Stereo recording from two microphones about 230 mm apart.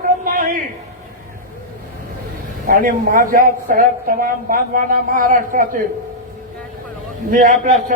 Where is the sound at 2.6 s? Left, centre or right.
Right.